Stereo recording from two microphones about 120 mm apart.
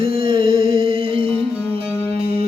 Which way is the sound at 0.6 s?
45° right (ahead or behind).